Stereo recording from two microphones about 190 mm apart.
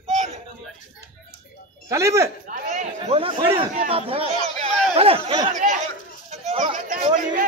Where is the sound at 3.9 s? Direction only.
30° right (ahead or behind).